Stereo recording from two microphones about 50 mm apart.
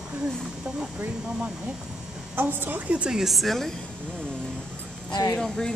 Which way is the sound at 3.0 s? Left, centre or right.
Centre.